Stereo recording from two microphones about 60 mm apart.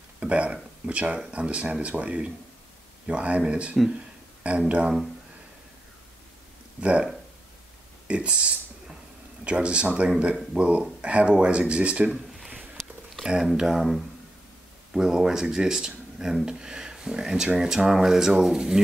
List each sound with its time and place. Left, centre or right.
0.2 s speech: right
6.8 s speech: centre
8.1 s speech: centre
13.2 s speech: centre